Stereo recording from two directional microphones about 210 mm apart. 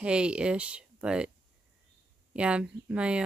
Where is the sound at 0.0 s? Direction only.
5° right (ahead or behind).